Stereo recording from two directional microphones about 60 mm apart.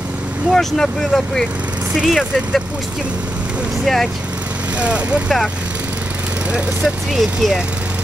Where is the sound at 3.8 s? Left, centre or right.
Centre.